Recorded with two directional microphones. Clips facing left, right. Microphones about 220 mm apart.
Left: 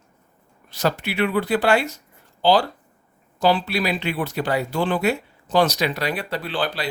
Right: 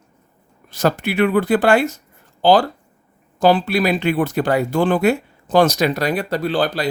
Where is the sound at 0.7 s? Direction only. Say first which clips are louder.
Right 5 dB; 50° right (ahead or behind).